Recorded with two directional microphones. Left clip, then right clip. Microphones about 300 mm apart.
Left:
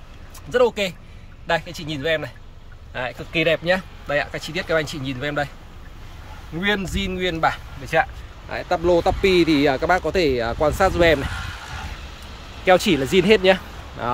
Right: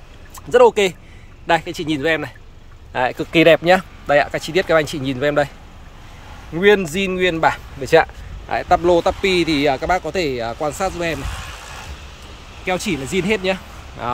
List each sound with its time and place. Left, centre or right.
0.5 s speech: centre
6.6 s speech: centre
11.4 s a sound: right
12.6 s speech: centre